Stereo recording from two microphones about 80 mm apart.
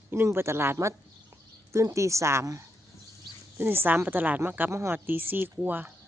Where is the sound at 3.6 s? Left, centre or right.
Right.